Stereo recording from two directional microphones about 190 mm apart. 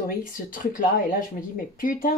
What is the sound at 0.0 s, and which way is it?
Speech, 50° left (ahead or behind).